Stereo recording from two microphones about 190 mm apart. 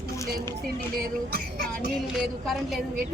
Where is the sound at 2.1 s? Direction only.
Centre (ahead or behind).